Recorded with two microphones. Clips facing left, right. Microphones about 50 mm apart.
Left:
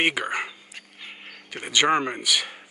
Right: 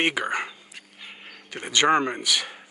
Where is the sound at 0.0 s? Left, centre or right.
Centre.